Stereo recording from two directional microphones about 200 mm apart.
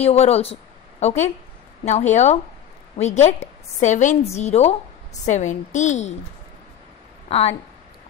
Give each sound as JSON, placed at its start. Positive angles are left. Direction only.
{"t": 0.0, "sound": "a woman's voice", "side_deg": 30}
{"t": 7.2, "sound": "speech", "side_deg": 30}